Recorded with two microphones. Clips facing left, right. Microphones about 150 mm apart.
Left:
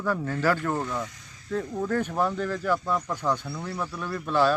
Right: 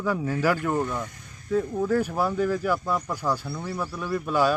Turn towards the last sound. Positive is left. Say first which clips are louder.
# even
turn(degrees=-10)  # may be behind; listen again after turning